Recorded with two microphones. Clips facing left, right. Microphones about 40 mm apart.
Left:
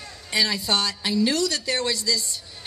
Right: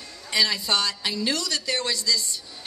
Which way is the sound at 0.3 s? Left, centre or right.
Centre.